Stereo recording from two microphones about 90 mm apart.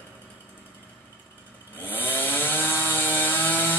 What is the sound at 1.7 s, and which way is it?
Chainsaw, 20° left (ahead or behind).